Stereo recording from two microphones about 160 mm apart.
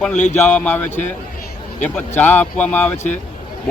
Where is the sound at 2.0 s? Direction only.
10° left (ahead or behind).